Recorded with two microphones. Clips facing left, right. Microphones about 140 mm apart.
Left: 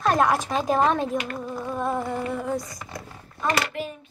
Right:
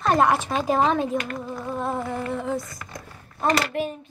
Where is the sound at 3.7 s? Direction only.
50° right (ahead or behind).